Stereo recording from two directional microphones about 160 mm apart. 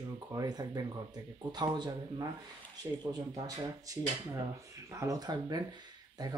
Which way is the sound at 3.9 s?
20° right (ahead or behind).